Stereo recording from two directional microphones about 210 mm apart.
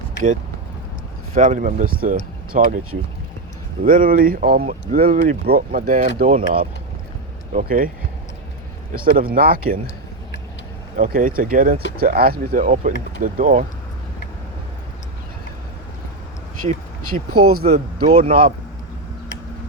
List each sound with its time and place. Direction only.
1.3 s speech: 35° right (ahead or behind)
3.8 s speech: 40° right (ahead or behind)
8.9 s speech: 45° right (ahead or behind)
10.9 s speech: 40° right (ahead or behind)
17.1 s speech: 90° right
18.2 s speech: 40° right (ahead or behind)